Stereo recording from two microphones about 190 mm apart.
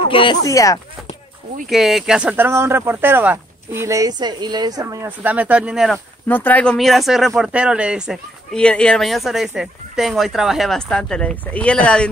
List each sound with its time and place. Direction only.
0.1 s speech: 25° left (ahead or behind)
1.7 s speech: centre (ahead or behind)
6.2 s speech: 10° left (ahead or behind)